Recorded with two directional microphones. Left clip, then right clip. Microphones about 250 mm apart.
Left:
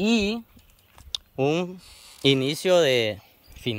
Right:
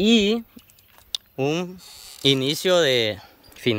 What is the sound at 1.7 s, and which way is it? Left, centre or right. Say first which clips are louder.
Speech: right 5 dB; centre.